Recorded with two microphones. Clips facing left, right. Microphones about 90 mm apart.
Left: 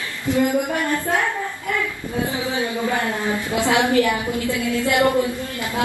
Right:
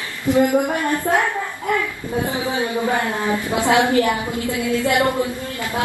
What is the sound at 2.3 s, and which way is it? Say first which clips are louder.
Speech: right 2 dB; 20° right (ahead or behind).